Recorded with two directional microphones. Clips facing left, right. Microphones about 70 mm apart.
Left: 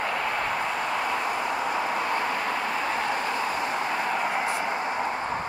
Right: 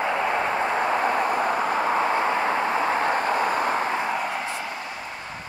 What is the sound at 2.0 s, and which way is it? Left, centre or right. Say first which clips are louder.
Vehicle: right 4 dB; right.